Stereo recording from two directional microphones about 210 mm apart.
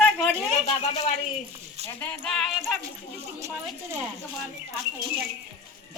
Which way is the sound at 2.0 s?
5° left (ahead or behind).